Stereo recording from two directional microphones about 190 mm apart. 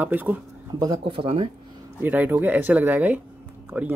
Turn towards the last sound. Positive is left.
turn(degrees=-10)  # may be behind; listen again after turning